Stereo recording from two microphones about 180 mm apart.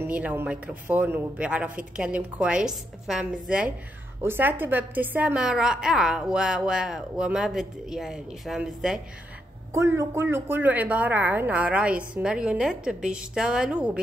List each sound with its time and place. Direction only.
0.0 s a woman's voice: 10° right (ahead or behind)
9.8 s a woman's voice: 15° right (ahead or behind)